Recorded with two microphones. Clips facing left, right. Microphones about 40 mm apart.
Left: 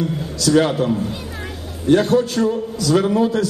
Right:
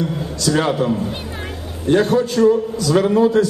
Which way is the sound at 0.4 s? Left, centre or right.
Right.